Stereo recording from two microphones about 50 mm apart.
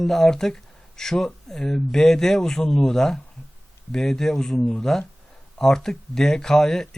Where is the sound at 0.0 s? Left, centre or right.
Centre.